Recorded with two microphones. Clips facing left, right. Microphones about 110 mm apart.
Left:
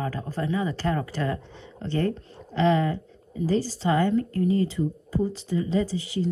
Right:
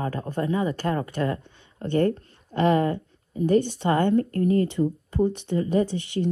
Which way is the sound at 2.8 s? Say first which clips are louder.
Right 2 dB; 50° right (ahead or behind).